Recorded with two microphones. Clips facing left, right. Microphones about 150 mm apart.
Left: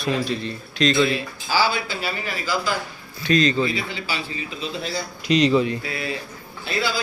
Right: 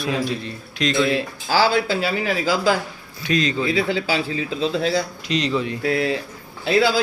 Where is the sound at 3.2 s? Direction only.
5° right (ahead or behind).